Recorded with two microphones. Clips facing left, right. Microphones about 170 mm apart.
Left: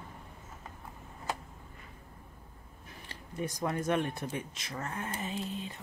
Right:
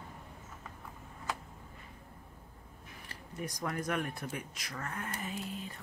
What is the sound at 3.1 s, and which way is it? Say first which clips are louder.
Speech: left 4 dB; 30° left (ahead or behind).